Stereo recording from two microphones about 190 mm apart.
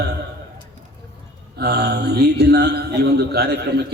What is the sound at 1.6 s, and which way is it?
A man's voice, 60° right (ahead or behind).